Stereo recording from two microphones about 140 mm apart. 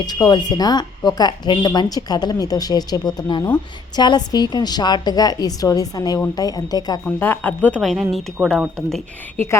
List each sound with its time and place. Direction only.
0.0 s speech: 30° left (ahead or behind)
7.0 s speech: 15° left (ahead or behind)
7.8 s speech: centre (ahead or behind)